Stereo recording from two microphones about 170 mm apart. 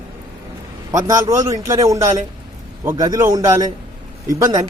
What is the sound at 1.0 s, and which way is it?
A man's voice, 20° right (ahead or behind).